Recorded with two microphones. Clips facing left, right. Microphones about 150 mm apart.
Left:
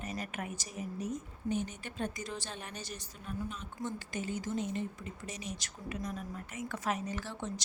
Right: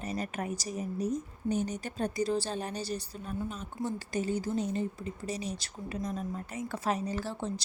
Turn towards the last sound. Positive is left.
turn(degrees=-35)  # may be behind; listen again after turning